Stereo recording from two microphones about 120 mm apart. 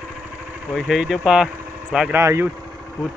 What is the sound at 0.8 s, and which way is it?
Speech, 5° right (ahead or behind).